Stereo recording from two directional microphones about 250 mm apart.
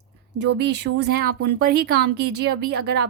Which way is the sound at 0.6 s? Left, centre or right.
Right.